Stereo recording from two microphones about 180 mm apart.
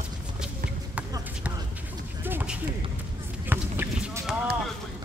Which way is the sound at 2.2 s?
10° right (ahead or behind).